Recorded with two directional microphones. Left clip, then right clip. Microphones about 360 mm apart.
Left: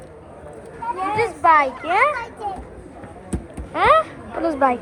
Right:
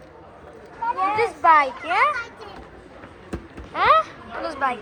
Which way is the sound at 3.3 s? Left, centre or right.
Centre.